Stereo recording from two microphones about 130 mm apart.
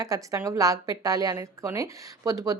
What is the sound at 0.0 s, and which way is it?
A woman's voice, 25° right (ahead or behind).